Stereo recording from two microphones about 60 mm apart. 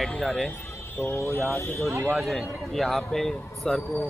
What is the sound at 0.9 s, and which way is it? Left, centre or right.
Speech, left.